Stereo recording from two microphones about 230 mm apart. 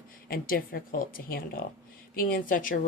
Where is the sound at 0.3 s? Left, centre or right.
Left.